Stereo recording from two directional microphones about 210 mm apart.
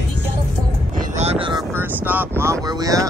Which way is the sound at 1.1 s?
30° right (ahead or behind).